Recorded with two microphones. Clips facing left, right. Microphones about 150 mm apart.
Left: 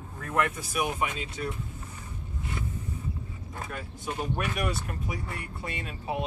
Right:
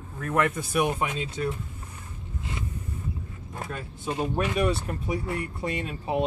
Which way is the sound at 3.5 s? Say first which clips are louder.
Right 3 dB; 20° right (ahead or behind).